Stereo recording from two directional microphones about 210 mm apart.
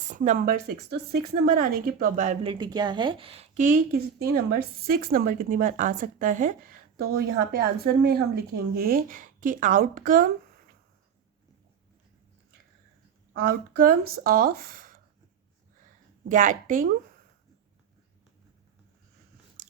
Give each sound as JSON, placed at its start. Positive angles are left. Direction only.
{"t": 0.1, "sound": "a woman's voice", "side_deg": -35}
{"t": 13.3, "sound": "speech", "side_deg": -45}
{"t": 16.3, "sound": "a woman's voice", "side_deg": -40}
{"t": 19.6, "sound": "biting", "side_deg": -40}